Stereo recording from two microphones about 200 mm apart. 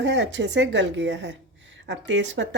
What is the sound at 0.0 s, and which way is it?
A woman's voice, 65° right (ahead or behind).